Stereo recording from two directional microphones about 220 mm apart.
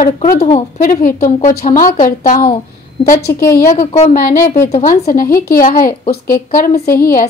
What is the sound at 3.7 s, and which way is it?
A woman's voice, 30° left (ahead or behind).